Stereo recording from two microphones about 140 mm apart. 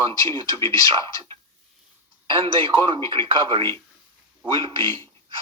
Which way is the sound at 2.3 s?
35° right (ahead or behind).